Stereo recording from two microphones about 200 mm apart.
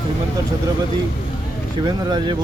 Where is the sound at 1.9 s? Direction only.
20° right (ahead or behind).